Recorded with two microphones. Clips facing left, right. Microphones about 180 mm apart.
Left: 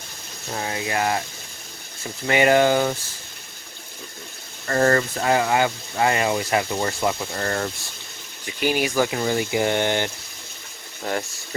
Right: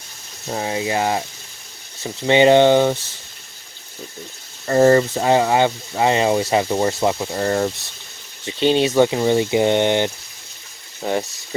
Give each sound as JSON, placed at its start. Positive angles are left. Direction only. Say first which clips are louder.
{"t": 0.5, "sound": "speech", "louder": "right 4 dB", "side_deg": -20}
{"t": 2.2, "sound": "speech", "louder": "right 5 dB", "side_deg": -25}
{"t": 4.6, "sound": "speech", "louder": "right 6 dB", "side_deg": -20}
{"t": 8.4, "sound": "speech", "louder": "right 6 dB", "side_deg": -25}